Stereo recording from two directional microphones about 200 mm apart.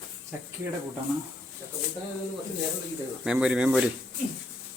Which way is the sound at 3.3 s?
5° right (ahead or behind).